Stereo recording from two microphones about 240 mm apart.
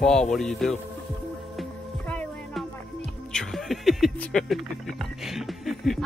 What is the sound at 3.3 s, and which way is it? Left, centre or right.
Speech, centre.